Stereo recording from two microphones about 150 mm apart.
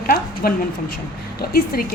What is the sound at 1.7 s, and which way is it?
Speech, 85° left.